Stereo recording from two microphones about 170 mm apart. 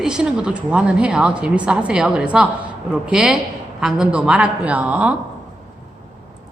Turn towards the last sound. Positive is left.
turn(degrees=-5)  # may be behind; listen again after turning